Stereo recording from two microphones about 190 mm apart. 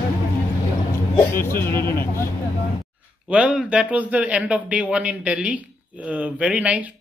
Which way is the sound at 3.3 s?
5° right (ahead or behind).